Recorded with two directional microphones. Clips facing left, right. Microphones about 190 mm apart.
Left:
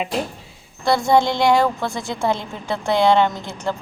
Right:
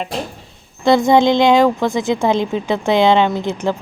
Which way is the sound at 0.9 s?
20° right (ahead or behind).